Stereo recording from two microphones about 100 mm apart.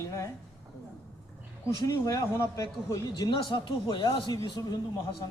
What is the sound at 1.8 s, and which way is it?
A man's voice, 35° left (ahead or behind).